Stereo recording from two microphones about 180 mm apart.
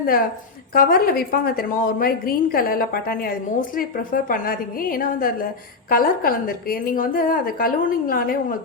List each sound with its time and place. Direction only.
0.0 s a woman's voice: 55° left (ahead or behind)